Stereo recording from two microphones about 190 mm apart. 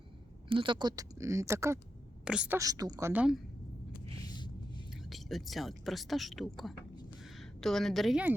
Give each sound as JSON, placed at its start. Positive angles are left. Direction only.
{"t": 0.4, "sound": "speech", "side_deg": -25}
{"t": 2.6, "sound": "speech", "side_deg": -20}
{"t": 4.2, "sound": "a sound", "side_deg": 25}
{"t": 5.0, "sound": "a woman's voice", "side_deg": 0}